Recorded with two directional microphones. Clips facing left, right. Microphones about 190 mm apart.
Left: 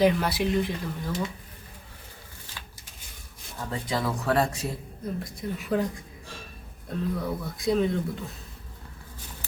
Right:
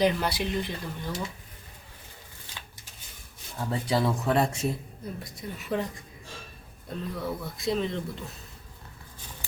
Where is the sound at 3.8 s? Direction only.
25° right (ahead or behind).